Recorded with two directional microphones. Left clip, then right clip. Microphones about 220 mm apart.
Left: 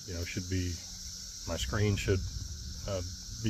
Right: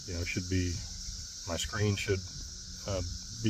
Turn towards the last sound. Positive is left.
turn(degrees=-20)  # may be behind; listen again after turning